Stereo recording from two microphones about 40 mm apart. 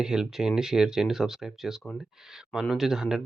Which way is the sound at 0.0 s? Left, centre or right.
Centre.